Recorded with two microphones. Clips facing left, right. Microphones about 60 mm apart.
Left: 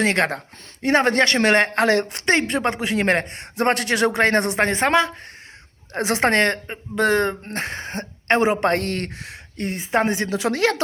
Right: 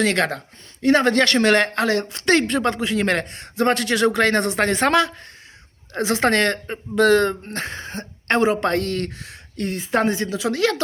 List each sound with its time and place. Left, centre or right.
0.0 s speech: left
5.9 s speech: left
6.7 s speech: centre
7.4 s speech: left
8.3 s speech: left
8.7 s speech: left
9.1 s speech: left